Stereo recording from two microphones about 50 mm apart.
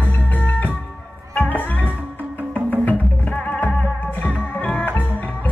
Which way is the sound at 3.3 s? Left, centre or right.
Left.